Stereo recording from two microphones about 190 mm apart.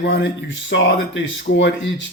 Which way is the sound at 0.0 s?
70° left (ahead or behind).